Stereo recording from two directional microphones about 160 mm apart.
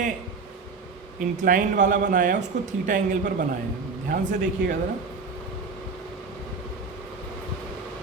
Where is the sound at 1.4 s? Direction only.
55° right (ahead or behind).